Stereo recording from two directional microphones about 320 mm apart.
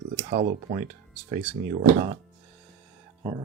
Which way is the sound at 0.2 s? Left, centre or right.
Right.